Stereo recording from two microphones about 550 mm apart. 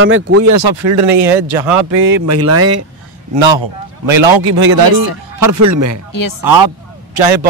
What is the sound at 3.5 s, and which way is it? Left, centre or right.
Speech, right.